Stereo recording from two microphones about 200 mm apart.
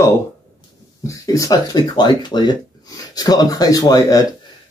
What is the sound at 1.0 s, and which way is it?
Speech, 15° left (ahead or behind).